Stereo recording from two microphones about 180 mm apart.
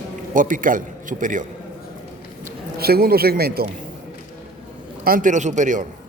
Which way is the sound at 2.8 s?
60° right (ahead or behind).